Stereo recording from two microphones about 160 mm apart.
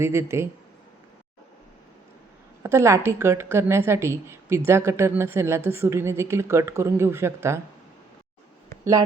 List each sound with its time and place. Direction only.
0.0 s a woman's voice: 15° right (ahead or behind)
2.6 s a woman's voice: 15° right (ahead or behind)
8.8 s speech: 20° right (ahead or behind)